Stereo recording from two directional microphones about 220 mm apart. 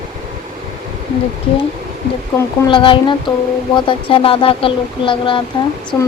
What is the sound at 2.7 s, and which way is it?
Speech, 20° left (ahead or behind).